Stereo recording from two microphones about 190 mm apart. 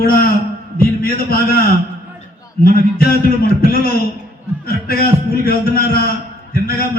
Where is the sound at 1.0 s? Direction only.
55° left (ahead or behind).